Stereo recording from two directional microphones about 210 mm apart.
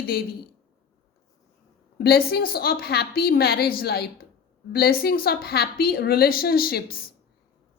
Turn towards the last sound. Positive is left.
turn(degrees=45)  # may be behind; listen again after turning